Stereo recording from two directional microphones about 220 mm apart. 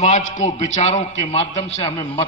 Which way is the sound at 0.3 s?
30° left (ahead or behind).